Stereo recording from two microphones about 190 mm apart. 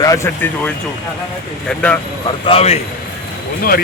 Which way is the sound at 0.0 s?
15° left (ahead or behind).